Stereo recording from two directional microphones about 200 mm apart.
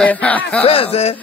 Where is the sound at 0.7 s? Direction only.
30° left (ahead or behind).